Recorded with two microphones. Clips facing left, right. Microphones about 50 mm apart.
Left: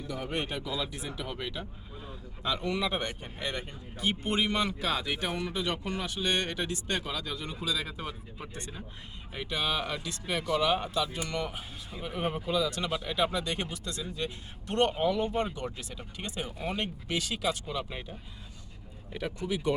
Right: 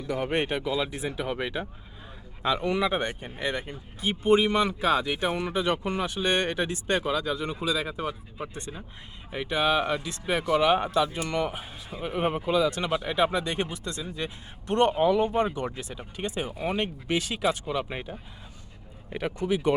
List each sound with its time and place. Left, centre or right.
0.1 s speech: right
16.5 s speech: centre
16.7 s speech: right